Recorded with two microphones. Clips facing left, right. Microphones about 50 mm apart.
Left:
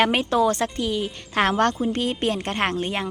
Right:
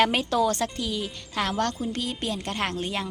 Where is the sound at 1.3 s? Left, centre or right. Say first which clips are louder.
Left 6 dB; left.